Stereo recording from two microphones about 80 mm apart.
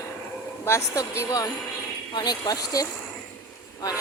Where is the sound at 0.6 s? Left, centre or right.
Left.